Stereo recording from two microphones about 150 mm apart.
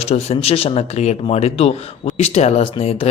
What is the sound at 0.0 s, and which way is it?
A man's voice, 45° left (ahead or behind).